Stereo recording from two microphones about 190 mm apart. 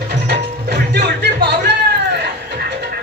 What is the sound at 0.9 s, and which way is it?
Music, 60° right (ahead or behind).